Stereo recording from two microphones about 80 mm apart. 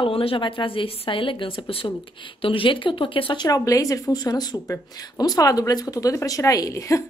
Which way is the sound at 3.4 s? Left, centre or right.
Left.